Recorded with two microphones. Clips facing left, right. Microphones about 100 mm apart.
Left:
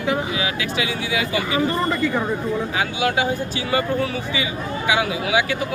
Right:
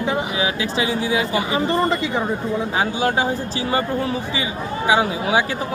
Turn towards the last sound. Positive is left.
turn(degrees=-35)  # may be behind; listen again after turning